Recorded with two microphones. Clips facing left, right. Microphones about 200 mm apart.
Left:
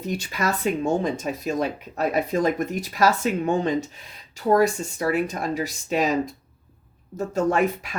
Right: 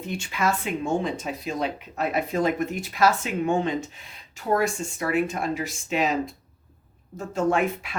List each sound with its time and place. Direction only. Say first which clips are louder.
0.0 s speech: even; 40° left (ahead or behind)